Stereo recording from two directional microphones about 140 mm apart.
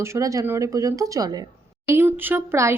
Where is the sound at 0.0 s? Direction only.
20° right (ahead or behind).